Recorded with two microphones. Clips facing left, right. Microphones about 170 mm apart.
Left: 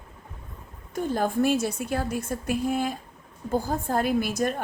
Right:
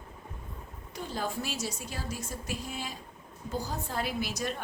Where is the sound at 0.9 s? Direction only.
50° left (ahead or behind).